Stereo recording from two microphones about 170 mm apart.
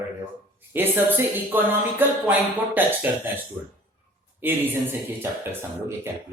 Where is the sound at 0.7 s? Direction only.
10° right (ahead or behind).